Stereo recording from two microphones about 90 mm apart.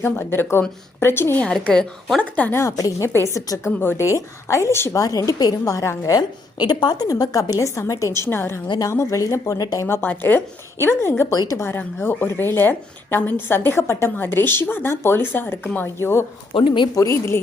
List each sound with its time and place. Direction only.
0.0 s speech: 25° left (ahead or behind)
1.5 s a woman's voice: 10° left (ahead or behind)
2.5 s a woman's voice: 35° left (ahead or behind)
3.8 s speech: 25° left (ahead or behind)
4.0 s a woman's voice: 35° left (ahead or behind)
5.0 s a woman's voice: 40° left (ahead or behind)
6.1 s a woman's voice: 50° left (ahead or behind)
9.8 s speech: 20° left (ahead or behind)
11.3 s speech: 35° left (ahead or behind)
16.5 s a woman's voice: 80° left
16.9 s a woman's voice: 35° left (ahead or behind)